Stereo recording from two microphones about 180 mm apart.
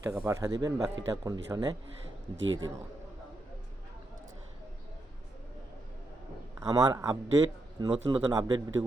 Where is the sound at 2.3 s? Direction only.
90° right.